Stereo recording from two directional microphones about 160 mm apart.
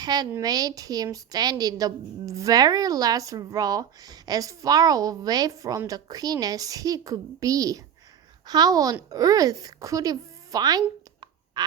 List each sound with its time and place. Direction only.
0.0 s a woman's voice: 25° right (ahead or behind)